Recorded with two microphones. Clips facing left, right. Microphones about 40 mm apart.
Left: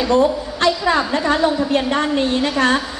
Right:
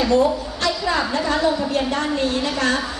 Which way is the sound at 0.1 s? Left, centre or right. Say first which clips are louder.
Left 2 dB; left.